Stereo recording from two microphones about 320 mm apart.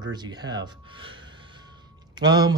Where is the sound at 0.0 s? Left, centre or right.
Centre.